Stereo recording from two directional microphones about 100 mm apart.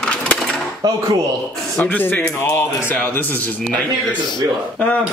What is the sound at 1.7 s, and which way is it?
A man's voice, 20° left (ahead or behind).